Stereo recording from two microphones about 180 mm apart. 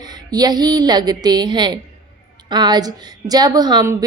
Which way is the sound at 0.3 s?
20° right (ahead or behind).